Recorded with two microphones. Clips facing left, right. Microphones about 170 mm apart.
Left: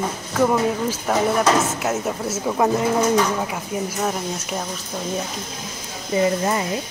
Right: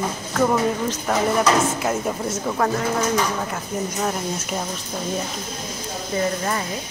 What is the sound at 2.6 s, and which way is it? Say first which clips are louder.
Speech: left 4 dB; 20° left (ahead or behind).